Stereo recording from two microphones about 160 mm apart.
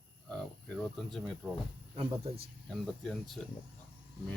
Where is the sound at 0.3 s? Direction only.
5° left (ahead or behind).